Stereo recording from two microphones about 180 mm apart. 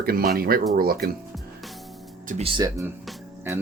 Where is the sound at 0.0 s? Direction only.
55° right (ahead or behind).